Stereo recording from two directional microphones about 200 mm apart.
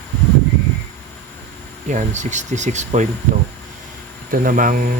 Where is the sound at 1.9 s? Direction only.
35° right (ahead or behind).